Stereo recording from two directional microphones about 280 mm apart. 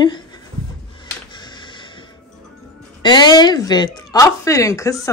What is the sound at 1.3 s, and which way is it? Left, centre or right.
Music, centre.